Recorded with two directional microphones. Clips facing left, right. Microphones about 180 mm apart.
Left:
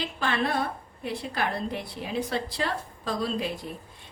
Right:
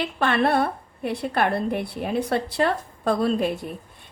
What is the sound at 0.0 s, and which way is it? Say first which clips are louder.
A woman's voice: right 6 dB; 60° right (ahead or behind).